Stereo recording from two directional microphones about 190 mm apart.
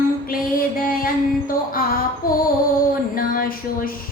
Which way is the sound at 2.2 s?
50° left (ahead or behind).